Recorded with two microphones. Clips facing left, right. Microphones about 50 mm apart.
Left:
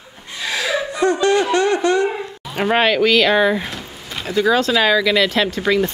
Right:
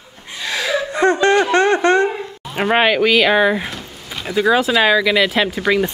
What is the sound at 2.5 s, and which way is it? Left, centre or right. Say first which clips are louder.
A woman's voice: right 1 dB; centre.